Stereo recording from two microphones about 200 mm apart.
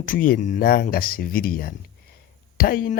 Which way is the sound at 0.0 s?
45° left (ahead or behind).